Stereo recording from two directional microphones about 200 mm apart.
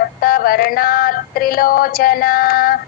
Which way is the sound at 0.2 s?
50° left (ahead or behind).